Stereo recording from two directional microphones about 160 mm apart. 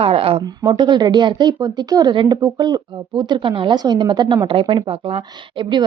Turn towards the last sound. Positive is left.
turn(degrees=-35)  # may be behind; listen again after turning